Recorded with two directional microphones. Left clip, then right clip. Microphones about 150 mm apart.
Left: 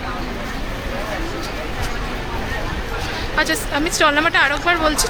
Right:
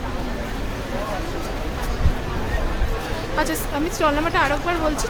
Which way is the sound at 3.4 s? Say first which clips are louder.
Left 4 dB; 20° right (ahead or behind).